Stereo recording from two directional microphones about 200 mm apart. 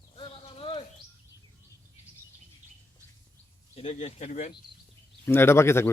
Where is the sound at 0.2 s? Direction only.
30° left (ahead or behind).